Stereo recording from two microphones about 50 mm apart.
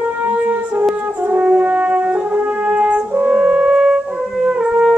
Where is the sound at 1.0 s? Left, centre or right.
Right; by 4.1 s centre.